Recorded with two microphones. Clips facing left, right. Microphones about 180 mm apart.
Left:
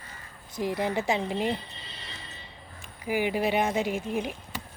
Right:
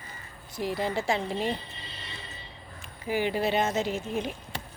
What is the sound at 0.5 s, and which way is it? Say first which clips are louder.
Speech: left 1 dB; 20° left (ahead or behind).